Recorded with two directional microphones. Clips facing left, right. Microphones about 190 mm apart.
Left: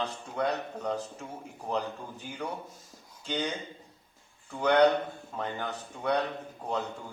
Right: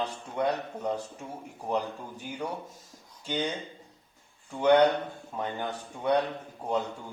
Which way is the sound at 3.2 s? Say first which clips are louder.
Right 1 dB; 10° right (ahead or behind).